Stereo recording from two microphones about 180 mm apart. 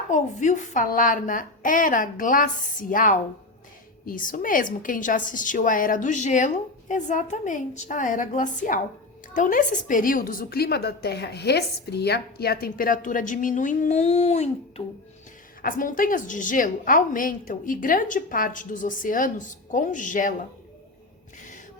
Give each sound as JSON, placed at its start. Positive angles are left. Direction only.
{"t": 0.1, "sound": "a woman's voice", "side_deg": 45}
{"t": 15.6, "sound": "a woman's voice", "side_deg": 50}